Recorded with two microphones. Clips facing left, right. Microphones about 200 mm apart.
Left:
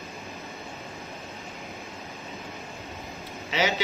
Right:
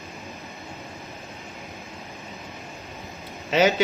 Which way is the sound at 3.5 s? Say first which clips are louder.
Right 7 dB; 50° right (ahead or behind).